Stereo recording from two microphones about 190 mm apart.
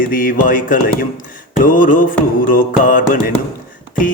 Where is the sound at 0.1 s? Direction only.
45° left (ahead or behind).